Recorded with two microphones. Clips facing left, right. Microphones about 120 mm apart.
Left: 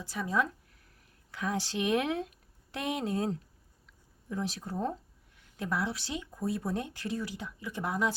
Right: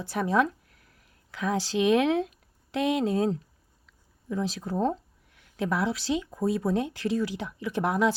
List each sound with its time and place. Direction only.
0.0 s speech: 65° right (ahead or behind)
1.3 s speech: 90° right
4.5 s speech: 90° right